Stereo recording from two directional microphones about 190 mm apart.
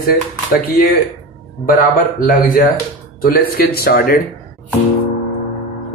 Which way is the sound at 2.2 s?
45° left (ahead or behind).